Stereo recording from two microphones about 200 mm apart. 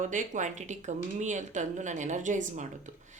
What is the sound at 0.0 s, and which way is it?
Speech, 40° right (ahead or behind).